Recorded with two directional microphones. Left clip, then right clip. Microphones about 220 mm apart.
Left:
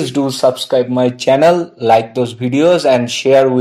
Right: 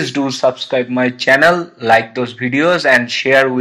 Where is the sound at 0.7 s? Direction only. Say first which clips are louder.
Left 3 dB; 25° left (ahead or behind).